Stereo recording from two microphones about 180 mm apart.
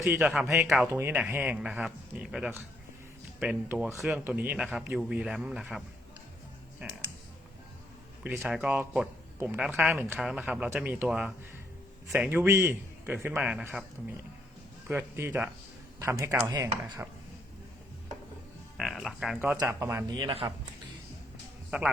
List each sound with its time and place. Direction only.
0.0 s a man's voice: 5° right (ahead or behind)
0.9 s a man's voice: 15° right (ahead or behind)
6.8 s speech: 10° right (ahead or behind)
8.2 s speech: 10° right (ahead or behind)
14.8 s speech: 10° right (ahead or behind)
18.8 s a man's voice: centre (ahead or behind)
19.6 s speech: 15° right (ahead or behind)
20.1 s speech: 25° right (ahead or behind)
21.7 s speech: 5° right (ahead or behind)